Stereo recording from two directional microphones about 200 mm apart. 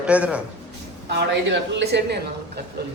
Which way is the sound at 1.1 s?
60° right (ahead or behind).